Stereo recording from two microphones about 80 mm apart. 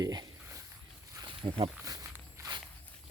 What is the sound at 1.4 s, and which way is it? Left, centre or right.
Speech, right.